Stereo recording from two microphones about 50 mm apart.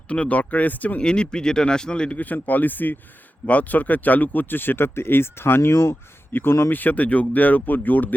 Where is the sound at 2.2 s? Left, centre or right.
Left.